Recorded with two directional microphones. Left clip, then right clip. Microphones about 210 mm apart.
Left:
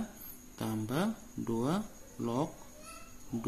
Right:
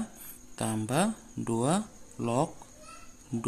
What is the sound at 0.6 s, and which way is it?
Speech, 45° right (ahead or behind).